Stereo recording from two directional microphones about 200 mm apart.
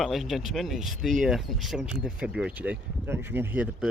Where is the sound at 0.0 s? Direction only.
Centre (ahead or behind).